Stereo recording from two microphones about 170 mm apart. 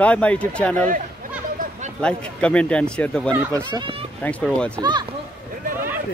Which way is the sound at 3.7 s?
30° right (ahead or behind).